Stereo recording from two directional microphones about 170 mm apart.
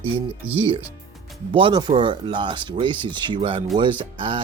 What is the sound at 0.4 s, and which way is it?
Speech, 10° right (ahead or behind).